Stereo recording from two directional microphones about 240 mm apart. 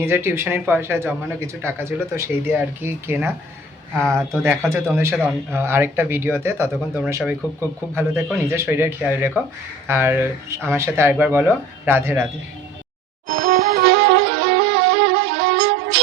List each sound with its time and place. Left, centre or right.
0.0 s speech: centre
3.9 s speech: centre
4.4 s speech: centre
13.2 s music: right